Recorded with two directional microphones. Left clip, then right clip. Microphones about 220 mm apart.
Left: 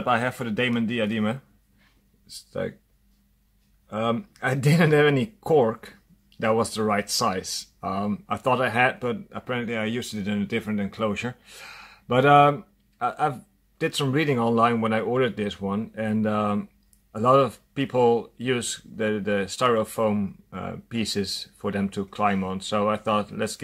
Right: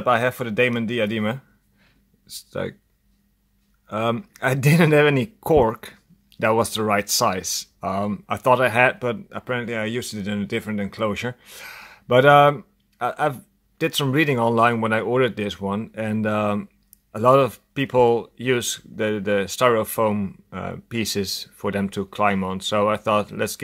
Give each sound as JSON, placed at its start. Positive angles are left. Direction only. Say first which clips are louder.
{"t": 0.0, "sound": "speech", "louder": "right 4 dB", "side_deg": -30}
{"t": 3.8, "sound": "speech", "louder": "right 3 dB", "side_deg": -35}